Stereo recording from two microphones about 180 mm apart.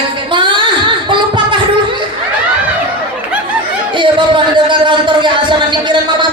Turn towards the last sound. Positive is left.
turn(degrees=-25)  # may be behind; listen again after turning